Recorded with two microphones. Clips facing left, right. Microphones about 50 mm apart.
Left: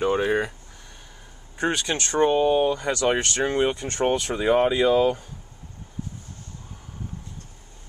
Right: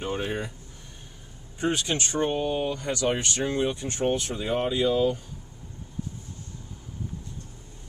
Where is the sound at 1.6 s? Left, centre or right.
Left.